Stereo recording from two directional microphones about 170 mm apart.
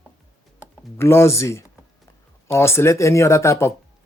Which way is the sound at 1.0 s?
15° left (ahead or behind).